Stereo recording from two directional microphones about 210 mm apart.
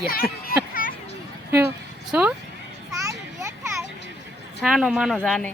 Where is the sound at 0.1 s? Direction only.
45° left (ahead or behind).